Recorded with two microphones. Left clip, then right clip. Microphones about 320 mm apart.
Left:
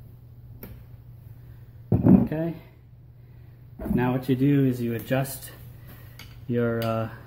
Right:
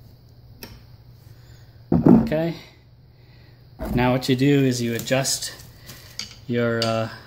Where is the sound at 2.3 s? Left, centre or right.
Right.